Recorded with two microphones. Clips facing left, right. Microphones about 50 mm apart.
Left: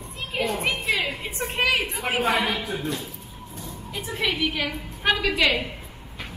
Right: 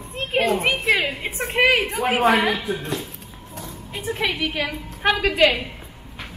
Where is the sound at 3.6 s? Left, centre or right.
Right.